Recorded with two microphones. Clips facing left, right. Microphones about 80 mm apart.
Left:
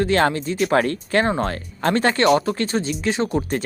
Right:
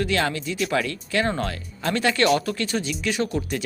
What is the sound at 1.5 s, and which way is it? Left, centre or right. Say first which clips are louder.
Speech: left 5 dB; left.